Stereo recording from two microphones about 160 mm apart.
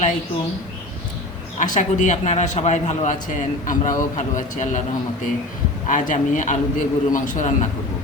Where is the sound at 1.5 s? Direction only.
50° left (ahead or behind).